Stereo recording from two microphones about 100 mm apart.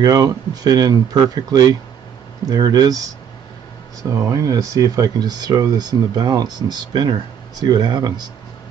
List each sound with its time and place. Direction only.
0.0 s speech: 40° right (ahead or behind)
4.1 s speech: 30° right (ahead or behind)